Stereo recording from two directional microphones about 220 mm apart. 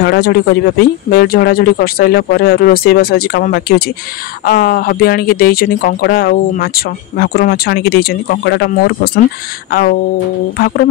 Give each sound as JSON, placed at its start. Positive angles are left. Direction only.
{"t": 0.0, "sound": "speech", "side_deg": 45}